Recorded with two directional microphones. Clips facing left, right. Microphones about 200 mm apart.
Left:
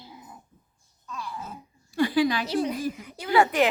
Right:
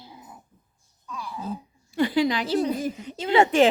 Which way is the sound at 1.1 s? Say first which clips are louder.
Right 1 dB; 15° right (ahead or behind).